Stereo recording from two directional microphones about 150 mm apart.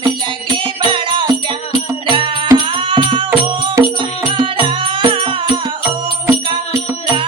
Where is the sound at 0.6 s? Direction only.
35° right (ahead or behind).